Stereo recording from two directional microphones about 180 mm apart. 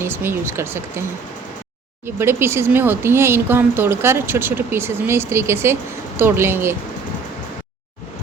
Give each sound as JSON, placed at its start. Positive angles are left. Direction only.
{"t": 0.0, "sound": "speech", "side_deg": -10}
{"t": 2.0, "sound": "speech", "side_deg": -15}